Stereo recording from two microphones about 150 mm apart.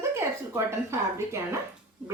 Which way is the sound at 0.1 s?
20° right (ahead or behind).